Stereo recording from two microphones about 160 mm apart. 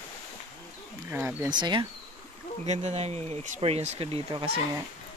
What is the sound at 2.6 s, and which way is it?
Speech, 45° right (ahead or behind).